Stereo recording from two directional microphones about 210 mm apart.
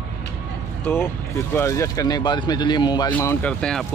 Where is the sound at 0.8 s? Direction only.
10° left (ahead or behind).